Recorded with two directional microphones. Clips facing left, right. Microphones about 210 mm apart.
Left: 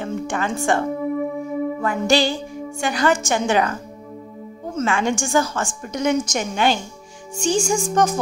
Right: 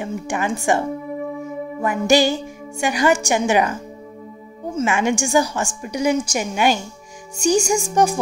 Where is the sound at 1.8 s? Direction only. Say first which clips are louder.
Right 4 dB; 15° right (ahead or behind).